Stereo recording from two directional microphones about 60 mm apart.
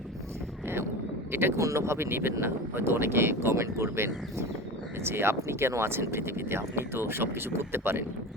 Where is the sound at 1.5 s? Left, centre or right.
Right.